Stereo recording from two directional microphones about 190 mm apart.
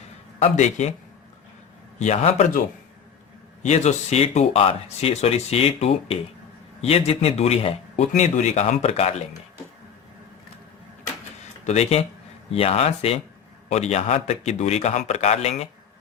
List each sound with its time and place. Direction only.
0.5 s speech: 40° left (ahead or behind)
2.0 s speech: 35° left (ahead or behind)
11.6 s speech: 35° left (ahead or behind)